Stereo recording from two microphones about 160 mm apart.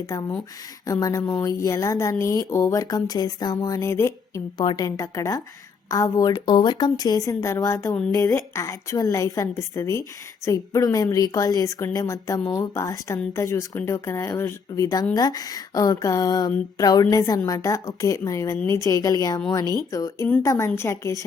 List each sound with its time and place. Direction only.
0.0 s a woman's voice: 25° left (ahead or behind)